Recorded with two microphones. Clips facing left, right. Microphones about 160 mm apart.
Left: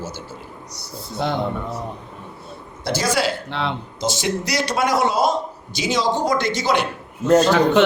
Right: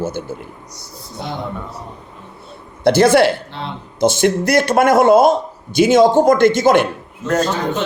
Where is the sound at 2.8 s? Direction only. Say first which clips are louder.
Right 10 dB; 55° right (ahead or behind).